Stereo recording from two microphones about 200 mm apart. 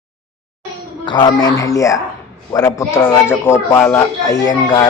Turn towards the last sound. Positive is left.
turn(degrees=20)  # may be behind; listen again after turning